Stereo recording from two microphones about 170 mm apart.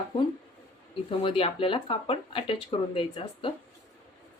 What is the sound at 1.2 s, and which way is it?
Speech, 35° left (ahead or behind).